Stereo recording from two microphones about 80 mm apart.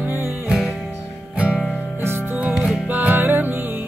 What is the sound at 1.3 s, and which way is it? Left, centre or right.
Music, centre.